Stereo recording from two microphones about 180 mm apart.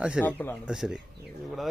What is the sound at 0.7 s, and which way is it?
Speech, 5° right (ahead or behind).